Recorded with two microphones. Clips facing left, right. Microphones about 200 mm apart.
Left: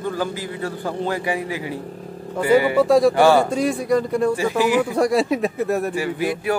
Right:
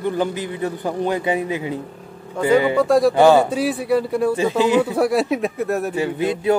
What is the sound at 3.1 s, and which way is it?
Speech, 20° right (ahead or behind).